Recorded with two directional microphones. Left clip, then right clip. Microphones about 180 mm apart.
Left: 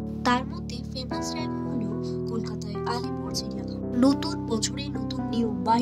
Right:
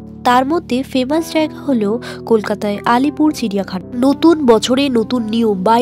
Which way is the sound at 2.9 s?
40° right (ahead or behind).